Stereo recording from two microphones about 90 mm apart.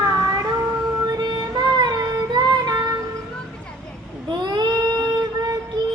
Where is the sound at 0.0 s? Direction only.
40° right (ahead or behind).